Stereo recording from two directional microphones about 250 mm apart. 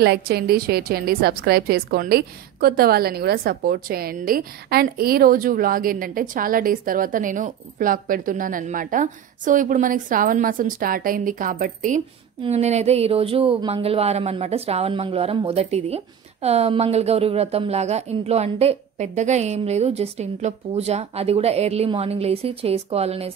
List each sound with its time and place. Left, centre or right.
0.0 s a woman's voice: right